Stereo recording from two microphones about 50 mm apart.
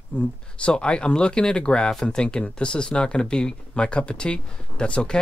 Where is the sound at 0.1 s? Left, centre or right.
Left.